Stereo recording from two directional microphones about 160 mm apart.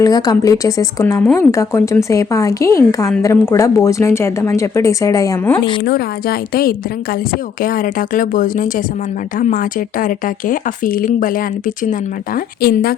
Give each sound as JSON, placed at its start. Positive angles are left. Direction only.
{"t": 0.0, "sound": "speech", "side_deg": 25}
{"t": 5.8, "sound": "a woman's voice", "side_deg": 70}
{"t": 12.6, "sound": "a woman's voice", "side_deg": 70}